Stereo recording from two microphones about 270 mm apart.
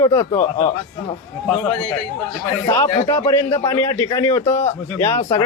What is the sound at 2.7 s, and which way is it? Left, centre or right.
A man's voice, centre.